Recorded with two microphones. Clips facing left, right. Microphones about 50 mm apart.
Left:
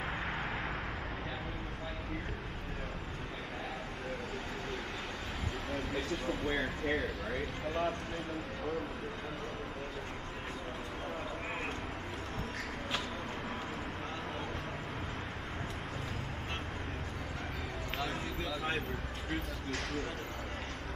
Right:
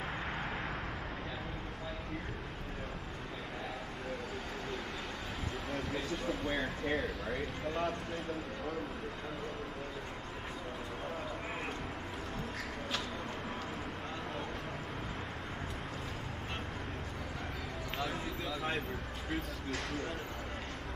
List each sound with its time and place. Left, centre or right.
5.7 s speech: centre
18.6 s a sound: centre
19.3 s speech: centre